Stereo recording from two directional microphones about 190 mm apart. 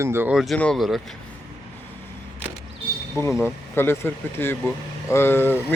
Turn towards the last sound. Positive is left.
turn(degrees=10)  # may be behind; listen again after turning